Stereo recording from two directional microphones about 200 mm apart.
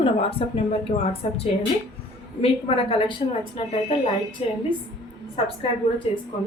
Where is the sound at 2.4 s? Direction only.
30° left (ahead or behind).